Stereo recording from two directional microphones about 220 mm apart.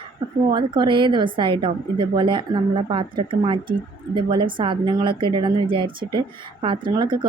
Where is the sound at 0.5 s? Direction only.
20° right (ahead or behind).